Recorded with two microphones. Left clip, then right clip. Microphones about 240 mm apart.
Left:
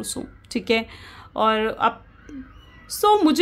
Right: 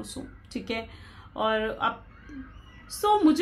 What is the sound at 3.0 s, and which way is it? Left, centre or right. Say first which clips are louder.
Speech: left 5 dB; left.